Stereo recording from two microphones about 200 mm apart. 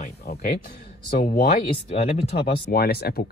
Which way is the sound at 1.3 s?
50° left (ahead or behind).